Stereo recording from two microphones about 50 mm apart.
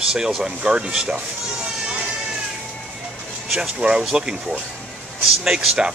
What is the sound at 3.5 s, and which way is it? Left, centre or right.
Speech, centre.